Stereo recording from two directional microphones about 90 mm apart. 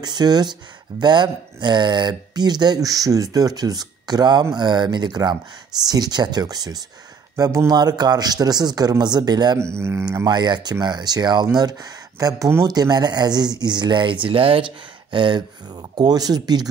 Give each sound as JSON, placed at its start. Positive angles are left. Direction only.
{"t": 0.0, "sound": "speech", "side_deg": -50}
{"t": 9.8, "sound": "speech", "side_deg": -30}
{"t": 10.2, "sound": "speech", "side_deg": -50}
{"t": 15.9, "sound": "speech", "side_deg": -50}